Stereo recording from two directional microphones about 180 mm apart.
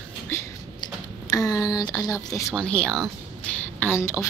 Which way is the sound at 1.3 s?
20° left (ahead or behind).